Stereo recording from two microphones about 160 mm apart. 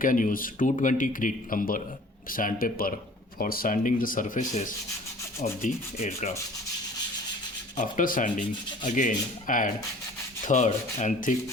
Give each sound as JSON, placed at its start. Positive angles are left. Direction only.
{"t": 0.0, "sound": "speech", "side_deg": 60}
{"t": 5.4, "sound": "rub", "side_deg": 45}
{"t": 7.8, "sound": "rub", "side_deg": 55}